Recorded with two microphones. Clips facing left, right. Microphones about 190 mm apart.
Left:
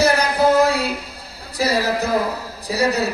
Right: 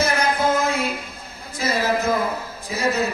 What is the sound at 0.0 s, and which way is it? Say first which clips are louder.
Child singing: left 4 dB; 35° left (ahead or behind).